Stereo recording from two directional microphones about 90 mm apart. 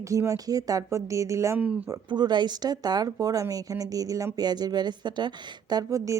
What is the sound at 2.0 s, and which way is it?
Speech, 55° right (ahead or behind).